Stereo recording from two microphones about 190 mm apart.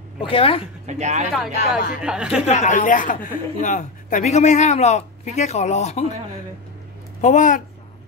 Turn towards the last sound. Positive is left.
turn(degrees=40)  # may be behind; listen again after turning